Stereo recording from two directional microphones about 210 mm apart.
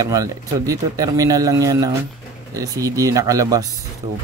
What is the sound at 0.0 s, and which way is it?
Speech, 15° right (ahead or behind).